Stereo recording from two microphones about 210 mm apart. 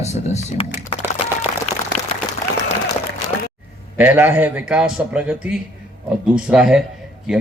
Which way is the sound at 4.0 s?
10° right (ahead or behind).